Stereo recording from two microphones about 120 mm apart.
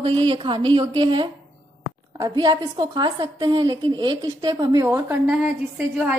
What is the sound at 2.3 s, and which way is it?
A woman's voice, 40° right (ahead or behind).